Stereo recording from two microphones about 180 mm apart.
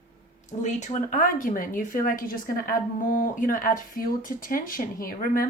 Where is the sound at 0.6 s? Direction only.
45° left (ahead or behind).